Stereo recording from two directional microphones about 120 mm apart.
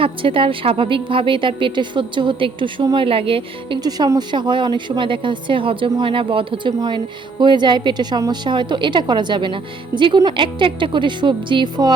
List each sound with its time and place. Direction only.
0.0 s a woman's voice: 50° right (ahead or behind)
3.8 s a woman's voice: 35° right (ahead or behind)